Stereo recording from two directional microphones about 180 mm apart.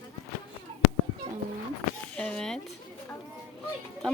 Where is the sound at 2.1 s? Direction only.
5° left (ahead or behind).